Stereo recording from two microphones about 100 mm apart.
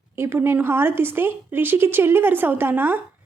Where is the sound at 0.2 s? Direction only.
20° right (ahead or behind).